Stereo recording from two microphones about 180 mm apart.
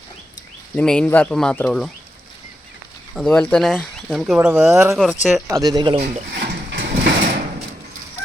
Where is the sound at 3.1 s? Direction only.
5° left (ahead or behind); by 6.0 s 25° right (ahead or behind).